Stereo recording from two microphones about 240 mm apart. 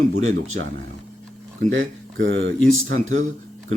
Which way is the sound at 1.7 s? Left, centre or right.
Right.